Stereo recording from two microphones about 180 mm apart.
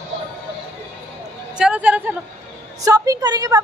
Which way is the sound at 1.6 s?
5° right (ahead or behind).